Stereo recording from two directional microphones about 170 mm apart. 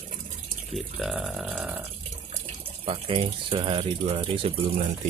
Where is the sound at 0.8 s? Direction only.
Centre (ahead or behind).